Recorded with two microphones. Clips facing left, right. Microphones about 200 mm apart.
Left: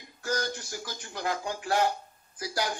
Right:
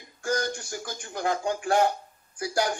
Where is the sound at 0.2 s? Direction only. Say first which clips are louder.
Right 3 dB; 30° right (ahead or behind).